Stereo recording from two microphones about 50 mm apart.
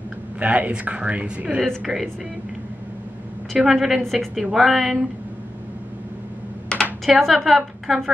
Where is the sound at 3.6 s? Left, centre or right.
Centre.